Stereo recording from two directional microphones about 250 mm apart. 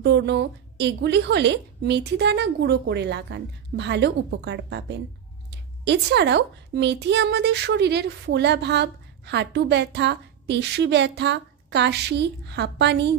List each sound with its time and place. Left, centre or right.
0.0 s a woman's voice: right